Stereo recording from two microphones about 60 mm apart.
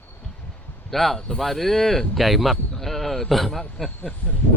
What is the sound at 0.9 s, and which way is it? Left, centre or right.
A man's voice, centre.